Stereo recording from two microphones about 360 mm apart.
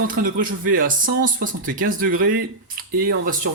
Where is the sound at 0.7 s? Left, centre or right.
Right.